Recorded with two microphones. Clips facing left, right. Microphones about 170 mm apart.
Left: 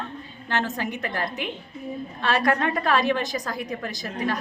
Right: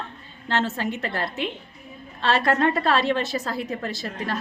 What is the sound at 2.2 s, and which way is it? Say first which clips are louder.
A woman's voice: right 2 dB; 15° left (ahead or behind).